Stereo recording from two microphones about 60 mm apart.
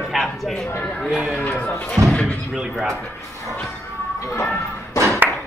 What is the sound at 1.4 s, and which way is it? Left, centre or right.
Speech, left.